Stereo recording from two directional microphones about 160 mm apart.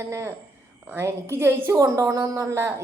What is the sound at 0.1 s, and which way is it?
A woman's voice, 15° right (ahead or behind).